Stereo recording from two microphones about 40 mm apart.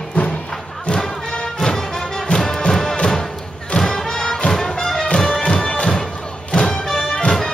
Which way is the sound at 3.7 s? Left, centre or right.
Centre.